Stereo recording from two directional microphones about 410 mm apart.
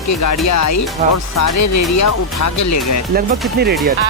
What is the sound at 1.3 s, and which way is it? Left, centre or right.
Speech, left.